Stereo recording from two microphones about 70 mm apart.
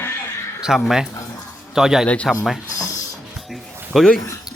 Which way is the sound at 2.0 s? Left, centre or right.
Centre.